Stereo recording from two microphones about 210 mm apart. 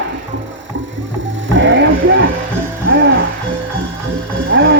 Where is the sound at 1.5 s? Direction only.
60° right (ahead or behind).